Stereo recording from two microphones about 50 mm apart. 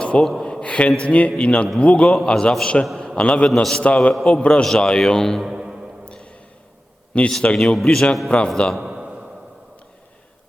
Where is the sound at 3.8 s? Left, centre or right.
Left; by 5.4 s centre.